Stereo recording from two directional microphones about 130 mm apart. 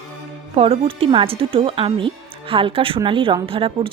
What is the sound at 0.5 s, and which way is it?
Speech, 50° right (ahead or behind).